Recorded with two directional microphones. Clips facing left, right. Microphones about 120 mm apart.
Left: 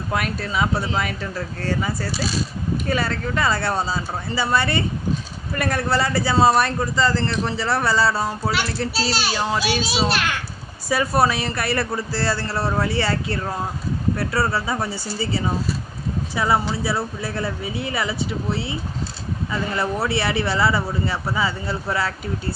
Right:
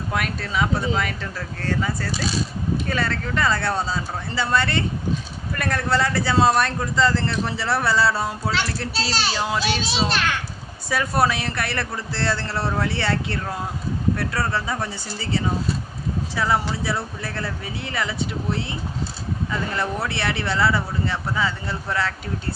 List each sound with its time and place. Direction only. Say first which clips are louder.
0.1 s speech: left 2 dB; 5° left (ahead or behind)